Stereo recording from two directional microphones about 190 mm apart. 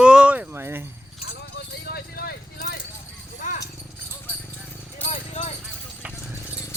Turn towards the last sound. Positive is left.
turn(degrees=10)  # may be behind; listen again after turning